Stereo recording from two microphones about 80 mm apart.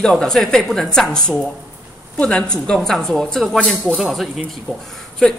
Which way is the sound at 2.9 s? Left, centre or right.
Centre.